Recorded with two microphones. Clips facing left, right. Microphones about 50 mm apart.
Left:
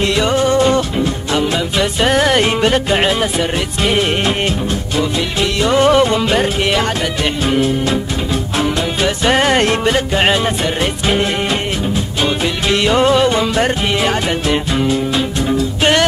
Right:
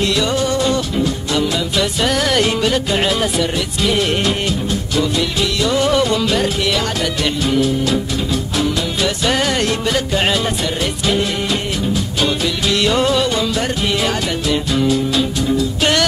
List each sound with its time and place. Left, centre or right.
0.0 s music: left